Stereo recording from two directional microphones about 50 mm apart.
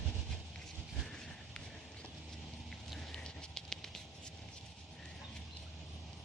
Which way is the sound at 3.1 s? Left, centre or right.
Centre.